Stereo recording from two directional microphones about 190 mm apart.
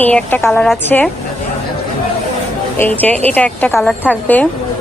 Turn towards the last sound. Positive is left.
turn(degrees=10)  # may be behind; listen again after turning